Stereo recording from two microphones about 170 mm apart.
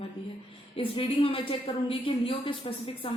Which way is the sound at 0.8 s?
30° left (ahead or behind).